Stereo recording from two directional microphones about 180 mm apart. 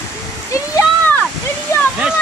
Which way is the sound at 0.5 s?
15° left (ahead or behind).